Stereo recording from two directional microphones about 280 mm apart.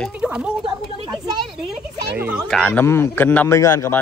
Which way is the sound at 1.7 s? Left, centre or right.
Centre.